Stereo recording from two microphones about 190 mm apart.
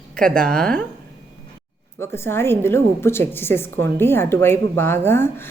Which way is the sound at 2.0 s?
15° left (ahead or behind).